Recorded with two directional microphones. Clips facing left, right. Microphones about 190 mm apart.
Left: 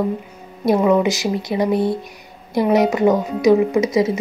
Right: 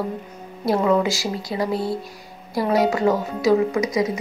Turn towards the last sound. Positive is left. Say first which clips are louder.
# left 5 dB
turn(degrees=25)  # may be behind; listen again after turning